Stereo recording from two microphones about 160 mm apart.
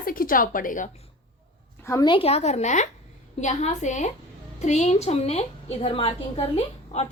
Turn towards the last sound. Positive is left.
turn(degrees=40)  # may be behind; listen again after turning